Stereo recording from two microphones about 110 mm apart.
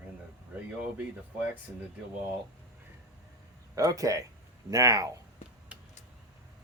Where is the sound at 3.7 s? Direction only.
30° right (ahead or behind).